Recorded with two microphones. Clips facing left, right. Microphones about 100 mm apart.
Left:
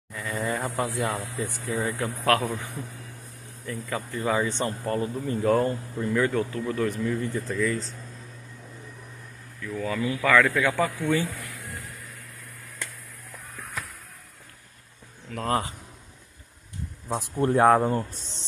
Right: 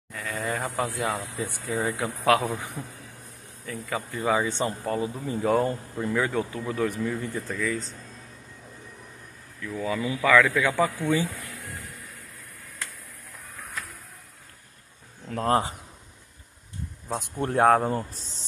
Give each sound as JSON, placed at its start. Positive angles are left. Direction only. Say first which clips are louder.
{"t": 0.1, "sound": "insect", "louder": "left 1 dB", "side_deg": 5}
{"t": 0.7, "sound": "speech", "louder": "even", "side_deg": 0}
{"t": 7.4, "sound": "speech", "louder": "left 4 dB", "side_deg": 0}
{"t": 9.8, "sound": "speech", "louder": "even", "side_deg": -15}
{"t": 10.3, "sound": "speech", "louder": "right 1 dB", "side_deg": -5}
{"t": 15.2, "sound": "speech", "louder": "right 3 dB", "side_deg": -30}
{"t": 17.4, "sound": "speech", "louder": "left 1 dB", "side_deg": 0}